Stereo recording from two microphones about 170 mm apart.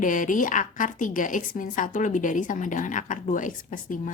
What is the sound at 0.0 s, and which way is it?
Speech, 50° left (ahead or behind).